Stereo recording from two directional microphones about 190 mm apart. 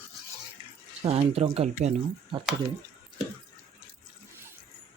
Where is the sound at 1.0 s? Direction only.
30° right (ahead or behind).